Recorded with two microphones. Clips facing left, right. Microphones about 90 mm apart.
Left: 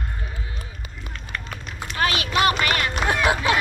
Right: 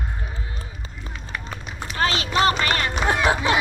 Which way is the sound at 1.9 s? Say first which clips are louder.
Even; 30° right (ahead or behind).